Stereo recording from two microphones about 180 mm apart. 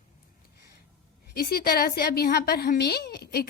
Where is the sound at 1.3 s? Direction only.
55° left (ahead or behind).